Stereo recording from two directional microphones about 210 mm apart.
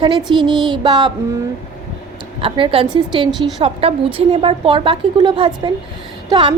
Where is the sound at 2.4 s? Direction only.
25° right (ahead or behind).